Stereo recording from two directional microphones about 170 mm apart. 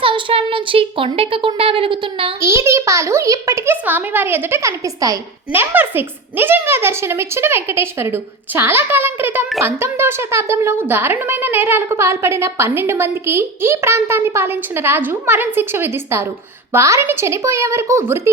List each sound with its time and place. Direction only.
0.0 s speech: 30° right (ahead or behind)
2.4 s a child's voice: 15° right (ahead or behind)